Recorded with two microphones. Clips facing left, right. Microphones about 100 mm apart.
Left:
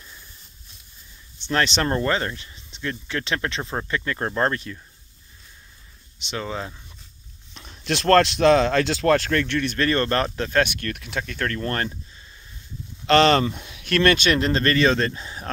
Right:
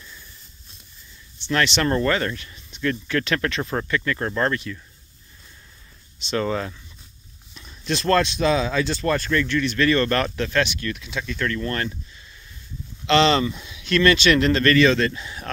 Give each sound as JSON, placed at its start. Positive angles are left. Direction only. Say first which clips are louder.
{"t": 1.4, "sound": "speech", "louder": "right 1 dB", "side_deg": 35}
{"t": 6.2, "sound": "speech", "louder": "right 6 dB", "side_deg": 10}
{"t": 7.5, "sound": "speech", "louder": "even", "side_deg": 65}
{"t": 10.6, "sound": "speech", "louder": "left 1 dB", "side_deg": 55}
{"t": 13.0, "sound": "speech", "louder": "left 1 dB", "side_deg": 45}
{"t": 14.3, "sound": "speech", "louder": "right 3 dB", "side_deg": 35}